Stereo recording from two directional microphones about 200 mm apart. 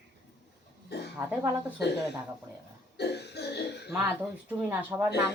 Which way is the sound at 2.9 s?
55° left (ahead or behind).